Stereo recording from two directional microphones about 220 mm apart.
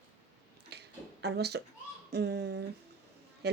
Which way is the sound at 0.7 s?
50° right (ahead or behind).